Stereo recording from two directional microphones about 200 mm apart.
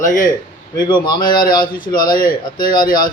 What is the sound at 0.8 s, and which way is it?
Speech, 20° left (ahead or behind).